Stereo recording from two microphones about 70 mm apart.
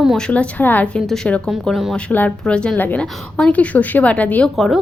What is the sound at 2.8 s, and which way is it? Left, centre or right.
Speech, left.